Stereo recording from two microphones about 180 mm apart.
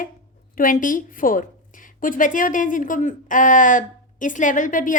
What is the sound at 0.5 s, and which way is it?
A woman's voice, 50° left (ahead or behind).